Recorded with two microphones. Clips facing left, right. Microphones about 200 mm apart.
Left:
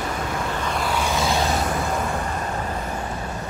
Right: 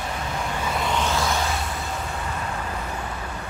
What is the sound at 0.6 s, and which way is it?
Vehicle, 5° right (ahead or behind).